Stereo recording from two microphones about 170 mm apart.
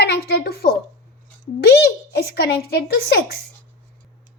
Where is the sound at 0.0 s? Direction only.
75° left (ahead or behind).